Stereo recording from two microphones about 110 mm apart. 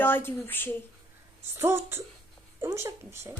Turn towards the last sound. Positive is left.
turn(degrees=-25)  # may be behind; listen again after turning